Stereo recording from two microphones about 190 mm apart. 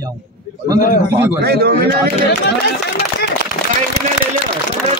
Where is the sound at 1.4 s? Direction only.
55° right (ahead or behind).